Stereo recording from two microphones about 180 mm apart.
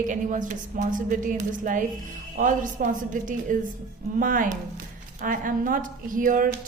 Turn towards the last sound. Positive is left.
turn(degrees=-50)  # may be behind; listen again after turning